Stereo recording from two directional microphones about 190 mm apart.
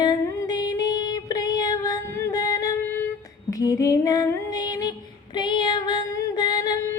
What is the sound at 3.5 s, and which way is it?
Female singing, 20° left (ahead or behind).